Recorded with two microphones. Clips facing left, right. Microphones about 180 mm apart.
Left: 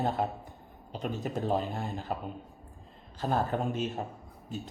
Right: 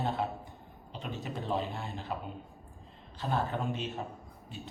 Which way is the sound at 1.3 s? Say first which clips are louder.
Left 2 dB; 45° left (ahead or behind).